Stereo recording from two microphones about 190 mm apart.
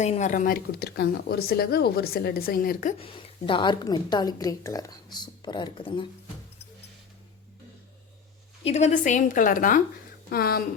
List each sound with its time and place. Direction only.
0.0 s speech: 40° left (ahead or behind)
3.0 s a woman's voice: 30° left (ahead or behind)
8.6 s speech: 35° left (ahead or behind); by 10.6 s 55° left (ahead or behind)